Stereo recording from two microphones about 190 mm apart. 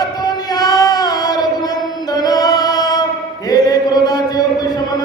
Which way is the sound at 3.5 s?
20° left (ahead or behind).